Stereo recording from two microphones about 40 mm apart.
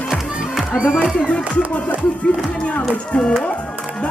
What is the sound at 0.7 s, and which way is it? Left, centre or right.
Speech, centre.